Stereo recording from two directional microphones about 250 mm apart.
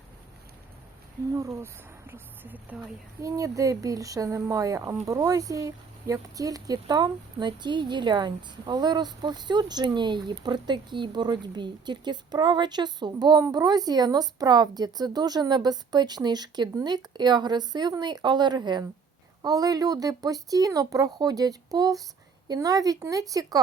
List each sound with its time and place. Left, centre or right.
1.3 s speech: centre